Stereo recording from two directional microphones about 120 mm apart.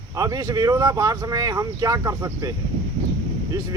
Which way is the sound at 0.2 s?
30° right (ahead or behind).